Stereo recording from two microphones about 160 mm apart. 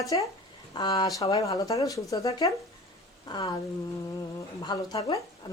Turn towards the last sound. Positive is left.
turn(degrees=25)  # may be behind; listen again after turning